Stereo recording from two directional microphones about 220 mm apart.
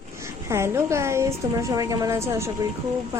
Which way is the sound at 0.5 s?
10° right (ahead or behind).